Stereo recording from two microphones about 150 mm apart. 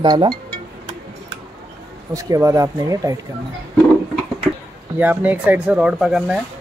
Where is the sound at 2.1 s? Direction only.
20° right (ahead or behind).